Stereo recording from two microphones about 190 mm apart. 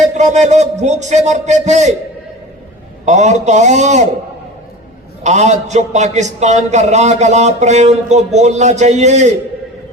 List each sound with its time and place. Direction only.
0.1 s a man's voice: 40° right (ahead or behind)
3.1 s a man's voice: 40° right (ahead or behind)
5.2 s a man's voice: 35° right (ahead or behind)